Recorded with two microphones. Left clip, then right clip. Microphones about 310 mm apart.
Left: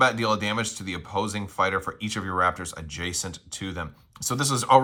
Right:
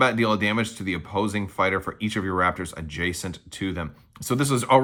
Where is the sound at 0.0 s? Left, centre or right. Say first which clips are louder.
Right 1 dB; centre.